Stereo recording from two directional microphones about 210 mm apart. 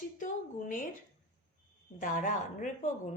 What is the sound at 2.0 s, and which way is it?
A woman's voice, 40° left (ahead or behind).